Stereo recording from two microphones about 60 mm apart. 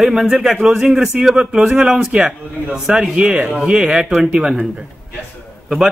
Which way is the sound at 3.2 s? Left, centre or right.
Centre.